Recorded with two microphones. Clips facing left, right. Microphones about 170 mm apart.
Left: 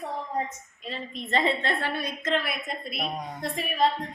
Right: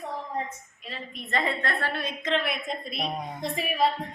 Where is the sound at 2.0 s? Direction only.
5° left (ahead or behind).